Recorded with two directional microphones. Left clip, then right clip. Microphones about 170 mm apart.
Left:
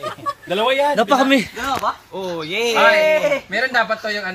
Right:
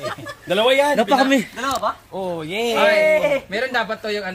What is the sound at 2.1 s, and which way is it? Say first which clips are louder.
Speech: left 1 dB; 85° right.